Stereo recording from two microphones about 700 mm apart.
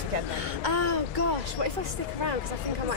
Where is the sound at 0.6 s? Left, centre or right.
Right.